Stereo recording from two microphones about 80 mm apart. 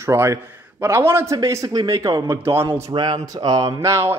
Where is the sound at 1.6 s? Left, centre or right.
Right.